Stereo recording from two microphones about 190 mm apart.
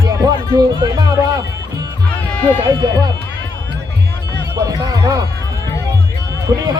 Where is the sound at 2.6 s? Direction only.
20° right (ahead or behind).